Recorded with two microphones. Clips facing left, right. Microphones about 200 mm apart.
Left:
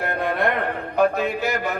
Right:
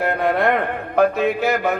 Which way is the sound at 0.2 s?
55° right (ahead or behind).